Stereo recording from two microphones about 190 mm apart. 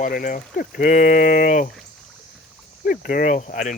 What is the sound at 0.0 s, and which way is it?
Speech, 45° left (ahead or behind).